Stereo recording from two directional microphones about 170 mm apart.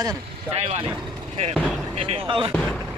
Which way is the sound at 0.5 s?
35° right (ahead or behind).